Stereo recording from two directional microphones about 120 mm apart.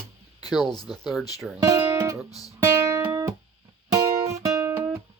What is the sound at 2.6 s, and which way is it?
Music, 25° right (ahead or behind).